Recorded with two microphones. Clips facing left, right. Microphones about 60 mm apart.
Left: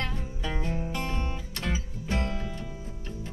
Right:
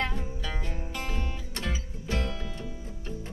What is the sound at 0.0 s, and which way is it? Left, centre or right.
Music, centre.